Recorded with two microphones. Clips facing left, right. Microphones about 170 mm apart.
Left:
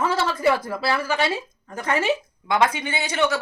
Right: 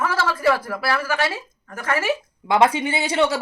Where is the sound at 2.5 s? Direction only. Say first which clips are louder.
Right 4 dB; 30° right (ahead or behind).